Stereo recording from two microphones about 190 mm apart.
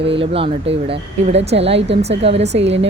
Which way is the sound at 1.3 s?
70° right (ahead or behind).